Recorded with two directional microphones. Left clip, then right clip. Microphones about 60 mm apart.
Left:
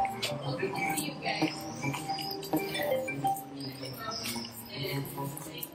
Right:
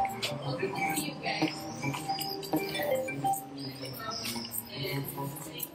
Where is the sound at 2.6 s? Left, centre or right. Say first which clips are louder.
Even; centre.